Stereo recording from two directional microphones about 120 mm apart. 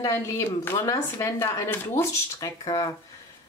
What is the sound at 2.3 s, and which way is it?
Speech, 35° left (ahead or behind).